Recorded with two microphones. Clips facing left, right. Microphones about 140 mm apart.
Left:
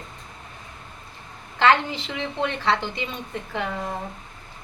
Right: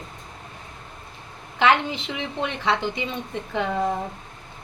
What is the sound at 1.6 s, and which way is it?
Speech, 15° right (ahead or behind).